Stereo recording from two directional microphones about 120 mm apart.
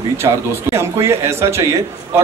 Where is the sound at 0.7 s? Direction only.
20° right (ahead or behind).